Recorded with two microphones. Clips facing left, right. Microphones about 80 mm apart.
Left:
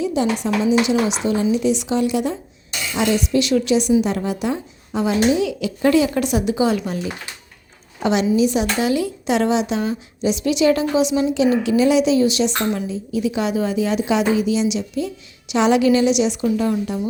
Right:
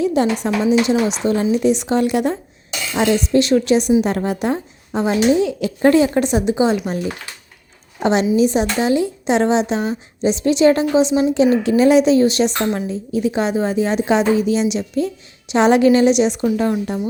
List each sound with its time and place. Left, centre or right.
0.0 s a sound: right
0.4 s speech: right
2.9 s a woman's voice: right
8.0 s a woman's voice: right
11.6 s a woman's voice: right